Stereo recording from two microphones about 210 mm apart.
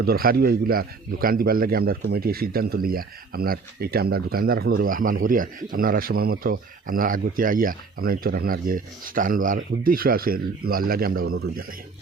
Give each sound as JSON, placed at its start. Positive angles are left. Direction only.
{"t": 0.0, "sound": "speech", "side_deg": -45}